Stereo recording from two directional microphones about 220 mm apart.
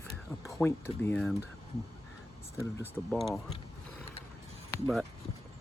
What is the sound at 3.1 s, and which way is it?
Speech, centre (ahead or behind).